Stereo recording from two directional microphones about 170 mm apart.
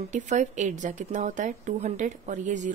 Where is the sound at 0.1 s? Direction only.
45° right (ahead or behind).